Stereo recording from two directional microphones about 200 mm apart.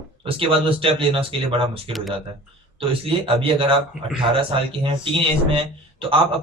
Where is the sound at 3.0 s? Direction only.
25° right (ahead or behind).